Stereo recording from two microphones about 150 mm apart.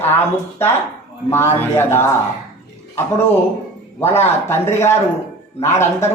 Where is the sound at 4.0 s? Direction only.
15° left (ahead or behind).